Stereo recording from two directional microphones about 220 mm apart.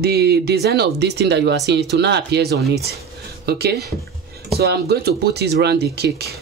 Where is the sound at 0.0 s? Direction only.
45° right (ahead or behind).